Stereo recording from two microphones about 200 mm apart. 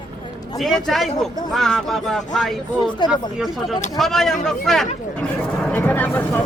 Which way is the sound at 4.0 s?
Centre (ahead or behind).